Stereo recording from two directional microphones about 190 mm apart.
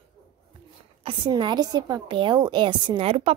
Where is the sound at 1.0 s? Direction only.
25° right (ahead or behind).